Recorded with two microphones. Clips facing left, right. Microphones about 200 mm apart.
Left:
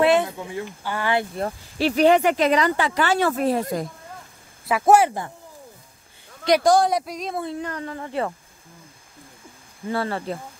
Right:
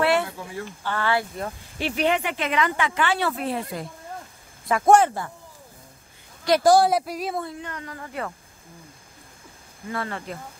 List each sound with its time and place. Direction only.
0.0 s speech: 20° left (ahead or behind)
1.4 s speech: 35° left (ahead or behind)
4.6 s speech: 5° left (ahead or behind)
6.6 s speech: 5° right (ahead or behind)
7.6 s a woman's voice: 30° left (ahead or behind)
9.8 s speech: 30° left (ahead or behind)